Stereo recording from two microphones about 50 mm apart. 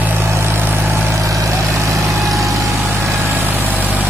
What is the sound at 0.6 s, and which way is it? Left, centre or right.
Vehicle, right.